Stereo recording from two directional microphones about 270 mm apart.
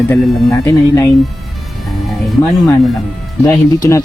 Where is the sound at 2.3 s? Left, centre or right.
Centre.